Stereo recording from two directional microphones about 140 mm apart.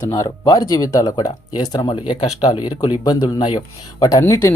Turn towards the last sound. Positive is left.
turn(degrees=25)  # may be behind; listen again after turning